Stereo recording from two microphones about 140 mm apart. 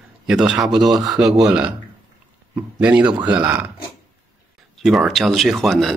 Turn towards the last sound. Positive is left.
turn(degrees=0)  # may be behind; listen again after turning